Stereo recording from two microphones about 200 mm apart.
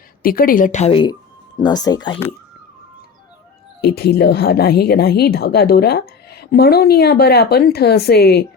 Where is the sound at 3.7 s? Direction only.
55° left (ahead or behind).